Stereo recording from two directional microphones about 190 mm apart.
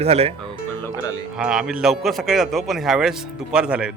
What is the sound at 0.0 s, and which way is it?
Speech, 30° right (ahead or behind).